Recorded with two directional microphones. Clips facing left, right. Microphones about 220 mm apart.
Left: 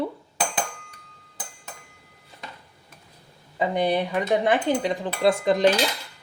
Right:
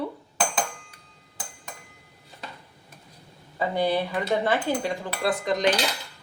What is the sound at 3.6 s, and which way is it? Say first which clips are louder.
Cutlery: left 2 dB; 20° left (ahead or behind).